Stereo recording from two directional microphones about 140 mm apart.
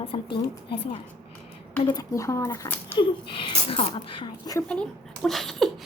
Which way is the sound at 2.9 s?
40° left (ahead or behind).